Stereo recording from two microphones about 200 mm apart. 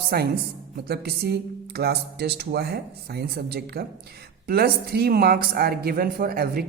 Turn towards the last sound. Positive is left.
turn(degrees=-50)  # may be behind; listen again after turning